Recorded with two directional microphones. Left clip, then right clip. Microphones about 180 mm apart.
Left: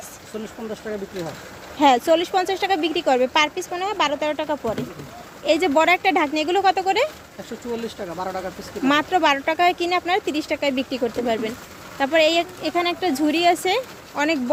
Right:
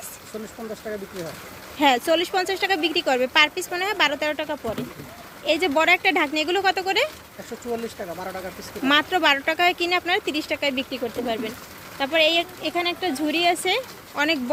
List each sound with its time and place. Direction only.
1.8 s speech: 10° left (ahead or behind)
4.4 s speech: 15° left (ahead or behind)
8.8 s speech: 5° left (ahead or behind)